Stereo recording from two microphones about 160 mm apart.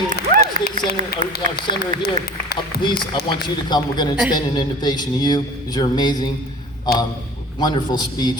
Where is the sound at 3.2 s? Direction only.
30° left (ahead or behind).